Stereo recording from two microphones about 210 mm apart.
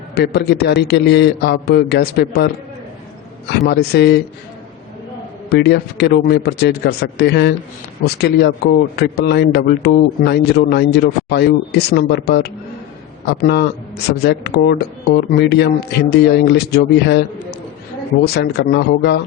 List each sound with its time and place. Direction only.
0.1 s speech: 50° left (ahead or behind)
3.7 s speech: 55° left (ahead or behind)
5.5 s speech: 50° left (ahead or behind)